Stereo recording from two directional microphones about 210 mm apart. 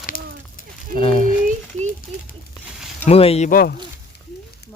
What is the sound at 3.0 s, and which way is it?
Speech, 30° left (ahead or behind).